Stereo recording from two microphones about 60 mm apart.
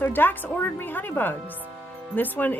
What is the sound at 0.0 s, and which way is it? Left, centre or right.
Speech, left.